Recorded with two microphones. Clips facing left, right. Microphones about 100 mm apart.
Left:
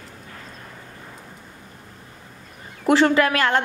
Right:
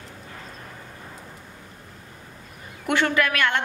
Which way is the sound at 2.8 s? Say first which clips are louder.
Left 6 dB; 30° left (ahead or behind).